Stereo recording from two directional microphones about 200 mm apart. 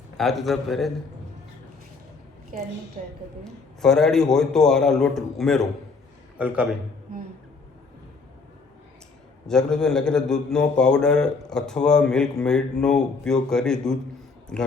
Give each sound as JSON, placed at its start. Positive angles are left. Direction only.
{"t": 0.2, "sound": "a man's voice", "side_deg": 0}
{"t": 3.0, "sound": "a woman's voice", "side_deg": -40}
{"t": 3.4, "sound": "a man's voice", "side_deg": 0}
{"t": 9.5, "sound": "a man's voice", "side_deg": 5}